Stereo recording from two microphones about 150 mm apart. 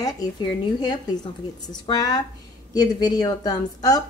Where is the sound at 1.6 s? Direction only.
25° left (ahead or behind).